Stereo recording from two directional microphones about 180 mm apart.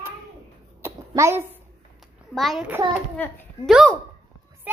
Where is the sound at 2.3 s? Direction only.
Centre (ahead or behind).